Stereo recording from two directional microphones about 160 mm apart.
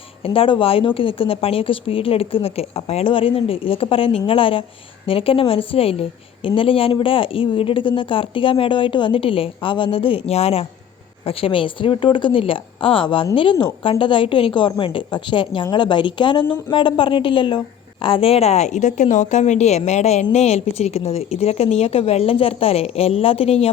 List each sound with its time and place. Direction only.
0.2 s a woman's voice: 35° left (ahead or behind)